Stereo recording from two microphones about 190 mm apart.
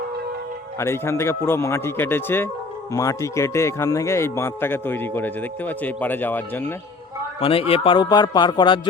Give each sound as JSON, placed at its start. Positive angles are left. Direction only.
{"t": 0.8, "sound": "a man's voice", "side_deg": 15}
{"t": 7.3, "sound": "speech", "side_deg": 30}